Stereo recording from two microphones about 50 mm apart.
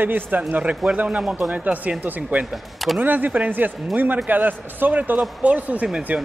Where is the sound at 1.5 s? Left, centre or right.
Right.